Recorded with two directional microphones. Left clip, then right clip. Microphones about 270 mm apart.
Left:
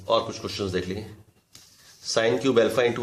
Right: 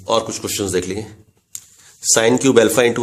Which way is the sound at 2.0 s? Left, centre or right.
Right.